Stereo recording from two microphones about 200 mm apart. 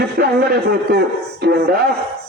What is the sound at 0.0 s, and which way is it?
A man's voice, 50° right (ahead or behind).